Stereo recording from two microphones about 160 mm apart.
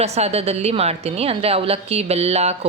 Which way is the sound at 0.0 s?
40° right (ahead or behind).